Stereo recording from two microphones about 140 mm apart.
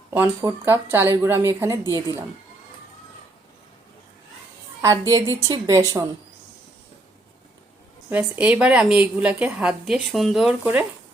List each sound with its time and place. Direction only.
0.1 s a woman's voice: 15° right (ahead or behind)
4.8 s a woman's voice: 25° right (ahead or behind)
8.1 s a woman's voice: 10° right (ahead or behind)